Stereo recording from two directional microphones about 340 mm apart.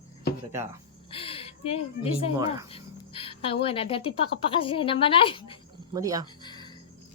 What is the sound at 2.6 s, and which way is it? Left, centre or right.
Speech, centre.